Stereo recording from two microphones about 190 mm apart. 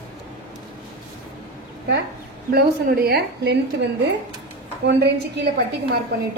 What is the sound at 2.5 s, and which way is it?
A woman's voice, 55° right (ahead or behind).